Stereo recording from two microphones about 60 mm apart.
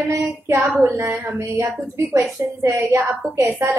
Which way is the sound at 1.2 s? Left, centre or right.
Right.